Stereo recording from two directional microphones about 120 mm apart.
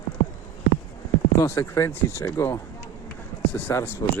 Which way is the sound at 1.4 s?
20° left (ahead or behind).